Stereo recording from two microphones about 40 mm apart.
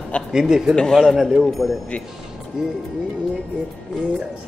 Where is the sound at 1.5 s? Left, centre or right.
Centre.